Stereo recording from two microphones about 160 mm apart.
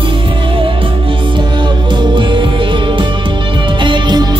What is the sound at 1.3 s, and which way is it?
Music, 30° right (ahead or behind).